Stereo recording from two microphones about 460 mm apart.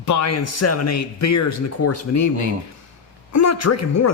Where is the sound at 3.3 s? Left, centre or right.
Left.